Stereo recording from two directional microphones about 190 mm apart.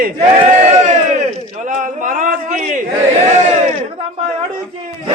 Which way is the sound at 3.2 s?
35° right (ahead or behind).